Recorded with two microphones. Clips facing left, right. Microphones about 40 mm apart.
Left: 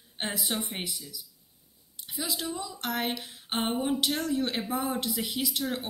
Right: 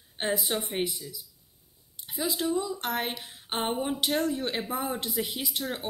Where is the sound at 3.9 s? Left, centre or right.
Right.